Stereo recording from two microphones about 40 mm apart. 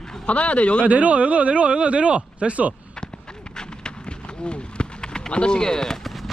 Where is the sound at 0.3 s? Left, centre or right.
Left.